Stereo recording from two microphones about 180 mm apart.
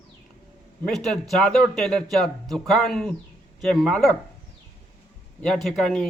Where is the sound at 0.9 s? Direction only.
Centre (ahead or behind).